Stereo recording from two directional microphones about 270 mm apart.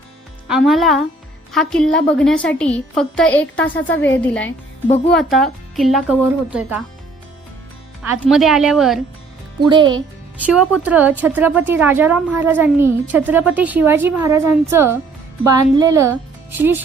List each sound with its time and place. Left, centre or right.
0.4 s a woman's voice: centre
8.2 s a woman's voice: centre
9.6 s a woman's voice: centre
10.3 s a woman's voice: centre